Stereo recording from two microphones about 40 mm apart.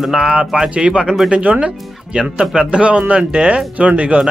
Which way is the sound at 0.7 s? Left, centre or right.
Right.